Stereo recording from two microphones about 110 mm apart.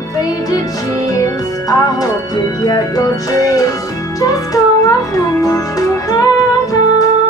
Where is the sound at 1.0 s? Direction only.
35° left (ahead or behind).